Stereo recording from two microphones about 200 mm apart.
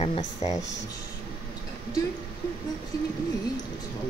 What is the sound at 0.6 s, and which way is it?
Speech, 65° left (ahead or behind).